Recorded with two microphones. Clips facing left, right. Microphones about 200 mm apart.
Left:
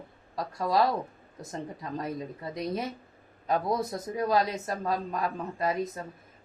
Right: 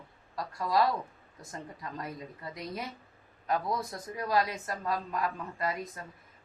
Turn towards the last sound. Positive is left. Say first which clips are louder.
# left 5 dB
turn(degrees=20)  # may be behind; listen again after turning